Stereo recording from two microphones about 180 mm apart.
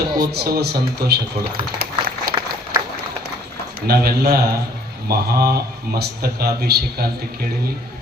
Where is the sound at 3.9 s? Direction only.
60° right (ahead or behind).